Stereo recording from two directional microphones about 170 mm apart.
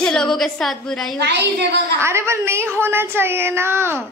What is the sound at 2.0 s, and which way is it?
A woman's voice, 15° right (ahead or behind).